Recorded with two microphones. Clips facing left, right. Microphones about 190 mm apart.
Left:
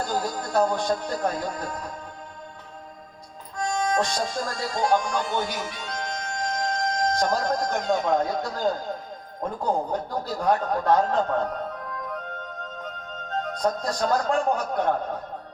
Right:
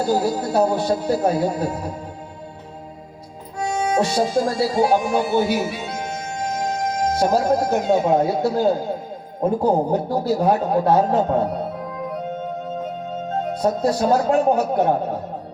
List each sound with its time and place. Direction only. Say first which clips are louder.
0.0 s speech: right 8 dB; 10° right (ahead or behind)
3.6 s speech: right 4 dB; 10° right (ahead or behind)
9.6 s speech: right 6 dB; 40° right (ahead or behind)
10.2 s speech: right 4 dB; 5° right (ahead or behind)
11.3 s music: right 6 dB; 10° right (ahead or behind)
13.4 s speech: right 6 dB; 10° right (ahead or behind)